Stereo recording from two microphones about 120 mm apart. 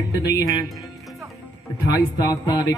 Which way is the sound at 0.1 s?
30° left (ahead or behind).